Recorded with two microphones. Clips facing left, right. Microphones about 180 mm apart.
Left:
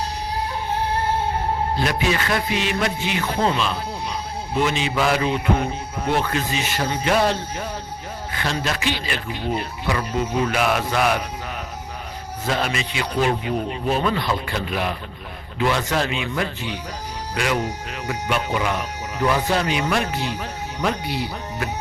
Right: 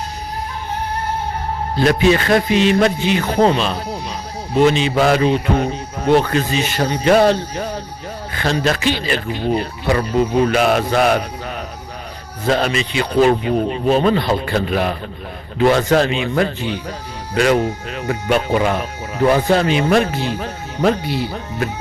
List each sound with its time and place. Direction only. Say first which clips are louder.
1.8 s a man's voice: right 13 dB; 30° right (ahead or behind)
2.5 s music: right 9 dB; 30° right (ahead or behind)
2.8 s a man's voice: right 7 dB; 35° right (ahead or behind)
12.5 s a man's voice: right 7 dB; 30° right (ahead or behind)